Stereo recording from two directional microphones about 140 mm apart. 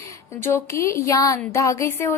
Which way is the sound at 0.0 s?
20° left (ahead or behind).